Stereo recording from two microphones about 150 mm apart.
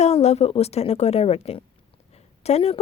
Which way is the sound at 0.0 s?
45° left (ahead or behind).